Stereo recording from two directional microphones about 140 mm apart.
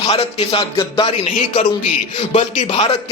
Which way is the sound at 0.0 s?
45° left (ahead or behind).